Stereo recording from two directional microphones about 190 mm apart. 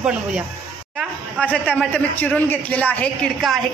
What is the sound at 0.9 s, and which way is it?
Speech, 5° left (ahead or behind).